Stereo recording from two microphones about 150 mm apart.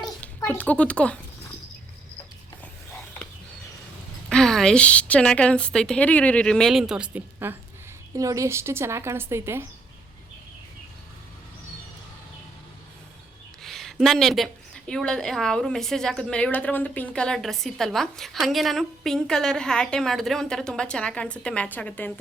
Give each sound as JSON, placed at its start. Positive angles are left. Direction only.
{"t": 0.2, "sound": "speech", "side_deg": 10}
{"t": 4.3, "sound": "a woman's voice", "side_deg": 5}
{"t": 13.6, "sound": "a woman's voice", "side_deg": 0}